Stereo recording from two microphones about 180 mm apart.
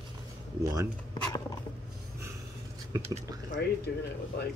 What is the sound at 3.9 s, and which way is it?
Speech, 65° left (ahead or behind).